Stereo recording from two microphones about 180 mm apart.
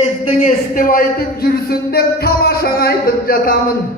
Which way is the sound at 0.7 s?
50° left (ahead or behind).